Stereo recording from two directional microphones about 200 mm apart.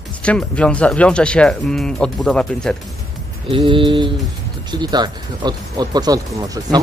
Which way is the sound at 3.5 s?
25° right (ahead or behind).